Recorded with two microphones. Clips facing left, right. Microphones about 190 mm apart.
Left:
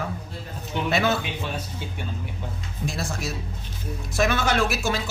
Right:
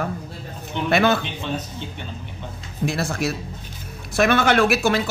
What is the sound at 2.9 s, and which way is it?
A man's voice, 60° right (ahead or behind).